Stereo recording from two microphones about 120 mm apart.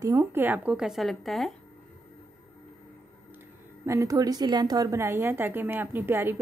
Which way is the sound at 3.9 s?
25° right (ahead or behind).